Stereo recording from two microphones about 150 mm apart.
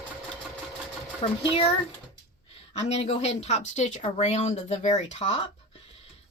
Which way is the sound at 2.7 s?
45° left (ahead or behind).